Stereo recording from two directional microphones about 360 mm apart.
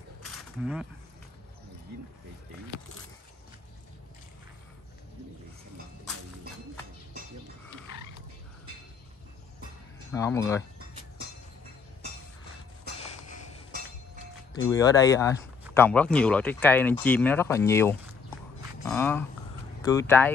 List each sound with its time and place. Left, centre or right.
0.2 s wild animals: centre
10.1 s speech: centre
14.5 s speech: centre